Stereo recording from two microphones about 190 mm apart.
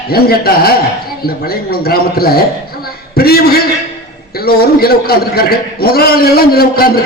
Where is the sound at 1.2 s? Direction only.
55° left (ahead or behind).